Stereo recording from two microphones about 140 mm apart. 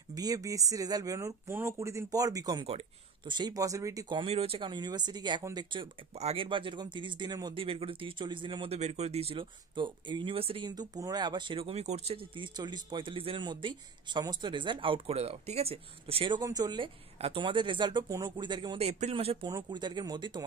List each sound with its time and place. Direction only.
0.1 s speech: 25° right (ahead or behind)
4.2 s speech: 45° right (ahead or behind)
6.1 s speech: 45° right (ahead or behind)
8.7 s speech: 50° right (ahead or behind)
16.3 s speech: 30° right (ahead or behind)
18.8 s speech: 50° right (ahead or behind)
19.4 s speech: 30° right (ahead or behind)